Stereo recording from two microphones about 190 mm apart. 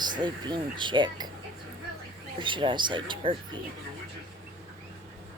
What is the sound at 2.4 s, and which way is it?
Speech, 25° right (ahead or behind).